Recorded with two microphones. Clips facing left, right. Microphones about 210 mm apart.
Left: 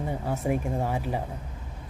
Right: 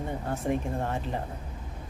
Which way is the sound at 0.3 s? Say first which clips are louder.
Left 1 dB; 10° left (ahead or behind).